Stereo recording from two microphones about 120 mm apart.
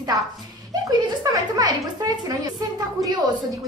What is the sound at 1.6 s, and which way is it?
Speech, 35° right (ahead or behind).